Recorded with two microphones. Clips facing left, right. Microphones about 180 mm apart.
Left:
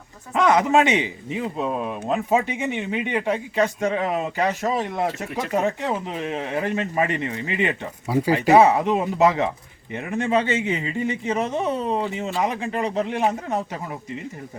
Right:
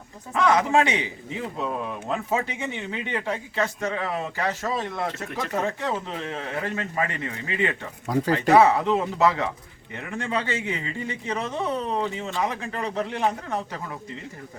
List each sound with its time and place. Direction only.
0.3 s a man's voice: 20° left (ahead or behind)